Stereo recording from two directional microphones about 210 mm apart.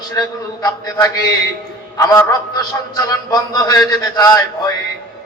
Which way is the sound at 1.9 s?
15° left (ahead or behind).